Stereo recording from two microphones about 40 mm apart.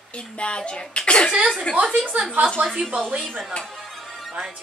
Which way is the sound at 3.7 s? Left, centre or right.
Centre.